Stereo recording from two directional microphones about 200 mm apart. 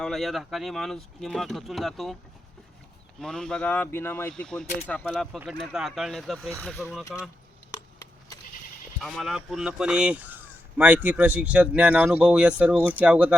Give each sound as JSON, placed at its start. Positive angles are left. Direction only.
{"t": 0.0, "sound": "speech", "side_deg": 0}
{"t": 3.2, "sound": "speech", "side_deg": 5}
{"t": 9.0, "sound": "speech", "side_deg": 0}